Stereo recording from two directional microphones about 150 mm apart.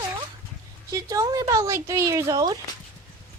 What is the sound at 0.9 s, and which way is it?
Speech, 20° right (ahead or behind).